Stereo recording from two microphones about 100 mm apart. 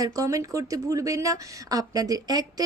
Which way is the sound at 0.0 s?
35° right (ahead or behind).